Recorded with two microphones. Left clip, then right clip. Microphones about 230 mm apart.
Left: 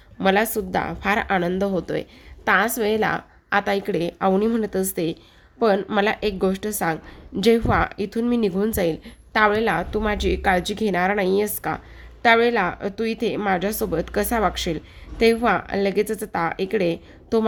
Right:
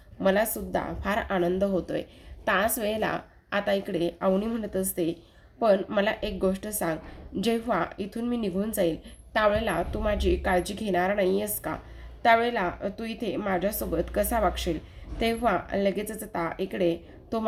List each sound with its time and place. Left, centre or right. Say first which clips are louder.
0.2 s a woman's voice: left 5 dB; left